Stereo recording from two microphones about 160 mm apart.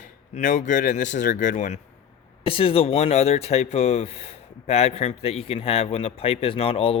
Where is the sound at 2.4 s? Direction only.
35° left (ahead or behind).